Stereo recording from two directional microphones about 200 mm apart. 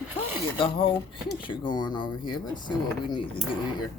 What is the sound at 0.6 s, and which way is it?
Speech, 25° left (ahead or behind).